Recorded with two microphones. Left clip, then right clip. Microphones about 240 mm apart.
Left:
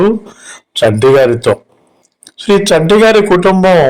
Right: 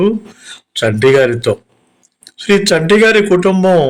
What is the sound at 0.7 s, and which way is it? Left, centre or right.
Speech, centre.